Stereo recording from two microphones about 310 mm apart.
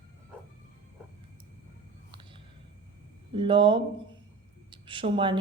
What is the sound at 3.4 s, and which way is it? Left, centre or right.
A woman's voice, centre.